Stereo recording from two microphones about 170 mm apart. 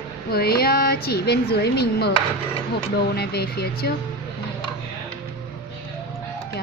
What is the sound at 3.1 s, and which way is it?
Speech, 70° left (ahead or behind).